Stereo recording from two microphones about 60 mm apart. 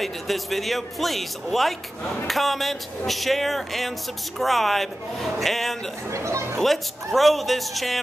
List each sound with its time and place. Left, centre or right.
0.0 s a man's voice: centre
6.1 s speech: right
6.6 s a man's voice: centre